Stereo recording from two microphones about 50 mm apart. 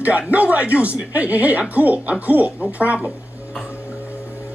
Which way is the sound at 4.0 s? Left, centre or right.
Left.